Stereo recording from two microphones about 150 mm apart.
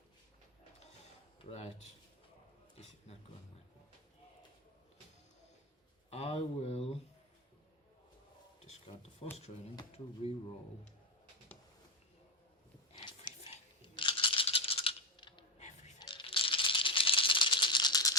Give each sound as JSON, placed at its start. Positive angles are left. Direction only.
{"t": 1.5, "sound": "speech", "side_deg": 45}
{"t": 6.1, "sound": "a sound", "side_deg": 45}
{"t": 9.2, "sound": "speech", "side_deg": 40}
{"t": 12.9, "sound": "rattle", "side_deg": 30}
{"t": 15.5, "sound": "a sound", "side_deg": 50}
{"t": 16.0, "sound": "rattle", "side_deg": 35}